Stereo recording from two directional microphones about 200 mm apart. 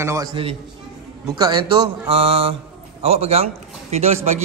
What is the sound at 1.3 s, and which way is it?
A man's voice, 20° right (ahead or behind).